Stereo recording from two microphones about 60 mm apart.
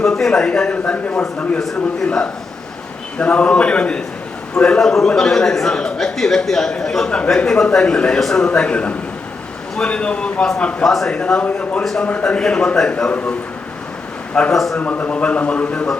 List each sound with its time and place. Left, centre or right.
0.0 s a man's voice: centre
1.5 s a man's voice: centre
10.8 s speech: centre
11.1 s a man's voice: centre
12.0 s a man's voice: left
13.1 s speech: left
14.5 s speech: centre
14.8 s speech: left